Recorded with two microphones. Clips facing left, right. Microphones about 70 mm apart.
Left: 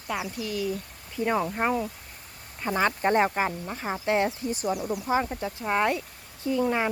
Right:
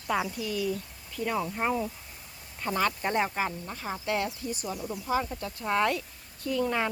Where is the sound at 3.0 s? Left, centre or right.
Left.